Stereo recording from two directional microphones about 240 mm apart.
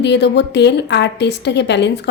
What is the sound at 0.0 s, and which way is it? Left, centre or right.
A woman's voice, left.